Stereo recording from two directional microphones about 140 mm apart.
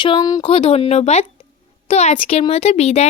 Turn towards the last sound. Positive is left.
turn(degrees=50)  # may be behind; listen again after turning